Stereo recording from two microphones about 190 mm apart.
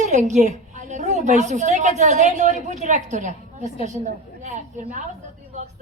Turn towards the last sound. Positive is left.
turn(degrees=-40)  # may be behind; listen again after turning